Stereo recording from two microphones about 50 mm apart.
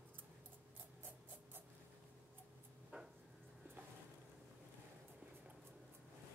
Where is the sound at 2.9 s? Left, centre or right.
Right.